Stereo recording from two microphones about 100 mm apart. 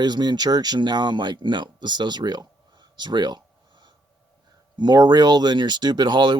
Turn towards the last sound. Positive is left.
turn(degrees=-50)  # may be behind; listen again after turning